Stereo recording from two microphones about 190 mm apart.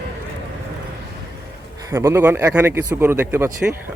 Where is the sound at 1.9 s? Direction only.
15° right (ahead or behind).